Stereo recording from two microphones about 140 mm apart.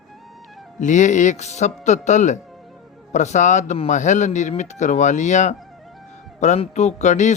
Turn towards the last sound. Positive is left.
turn(degrees=60)  # may be behind; listen again after turning